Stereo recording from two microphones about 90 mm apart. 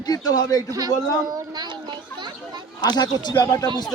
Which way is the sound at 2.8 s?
50° left (ahead or behind).